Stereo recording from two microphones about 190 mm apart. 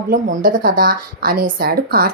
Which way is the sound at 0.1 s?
45° right (ahead or behind).